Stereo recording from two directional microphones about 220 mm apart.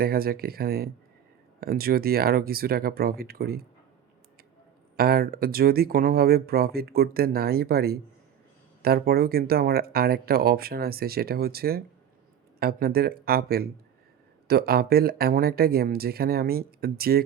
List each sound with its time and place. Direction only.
0.0 s speech: 45° right (ahead or behind)
4.9 s speech: 45° right (ahead or behind)